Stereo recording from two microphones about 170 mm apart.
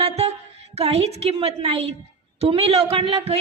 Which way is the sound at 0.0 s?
40° right (ahead or behind).